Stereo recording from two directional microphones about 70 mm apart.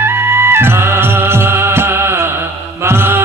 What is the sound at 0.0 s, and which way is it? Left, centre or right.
Music, right.